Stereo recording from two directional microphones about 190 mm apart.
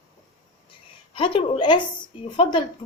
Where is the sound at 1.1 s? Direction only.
25° left (ahead or behind).